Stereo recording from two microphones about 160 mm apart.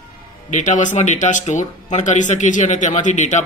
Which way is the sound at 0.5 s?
50° left (ahead or behind).